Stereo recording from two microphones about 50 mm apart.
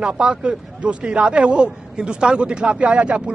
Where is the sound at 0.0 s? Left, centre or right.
Centre.